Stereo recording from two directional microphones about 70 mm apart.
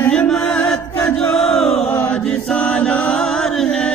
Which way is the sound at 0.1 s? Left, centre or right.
Centre.